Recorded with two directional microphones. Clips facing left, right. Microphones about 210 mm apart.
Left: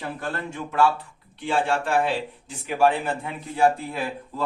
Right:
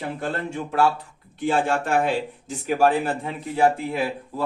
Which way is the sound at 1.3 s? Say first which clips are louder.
Right 2 dB; 45° right (ahead or behind).